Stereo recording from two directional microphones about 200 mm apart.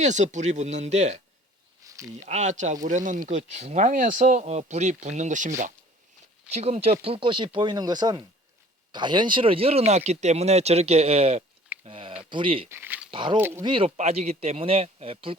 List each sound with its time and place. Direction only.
0.0 s speech: 35° right (ahead or behind)
1.8 s a sound: 15° right (ahead or behind)
2.2 s speech: 35° right (ahead or behind)
11.9 s a sound: 25° right (ahead or behind)
12.3 s speech: 25° right (ahead or behind)
12.6 s speech: 10° right (ahead or behind)
13.1 s a sound: 25° right (ahead or behind)
13.3 s speech: 10° right (ahead or behind)
13.6 s speech: 25° right (ahead or behind)